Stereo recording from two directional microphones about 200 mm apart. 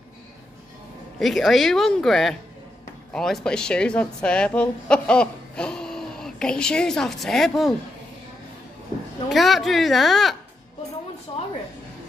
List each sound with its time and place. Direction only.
1.2 s a woman's voice: centre (ahead or behind)
9.3 s a woman's voice: centre (ahead or behind)
11.3 s a sound: 25° left (ahead or behind)